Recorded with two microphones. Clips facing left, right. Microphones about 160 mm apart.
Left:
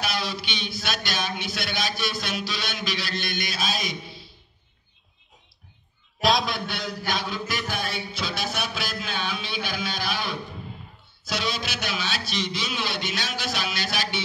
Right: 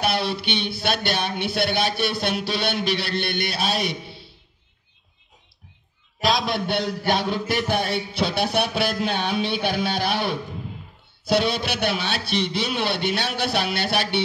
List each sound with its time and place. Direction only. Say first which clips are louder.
0.0 s speech: right 6 dB; 60° right (ahead or behind)
6.1 s a man's voice: right 1 dB; centre (ahead or behind)
7.0 s speech: right 6 dB; 65° right (ahead or behind)